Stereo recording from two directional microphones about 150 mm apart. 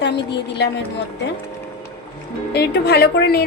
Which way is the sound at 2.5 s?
90° left.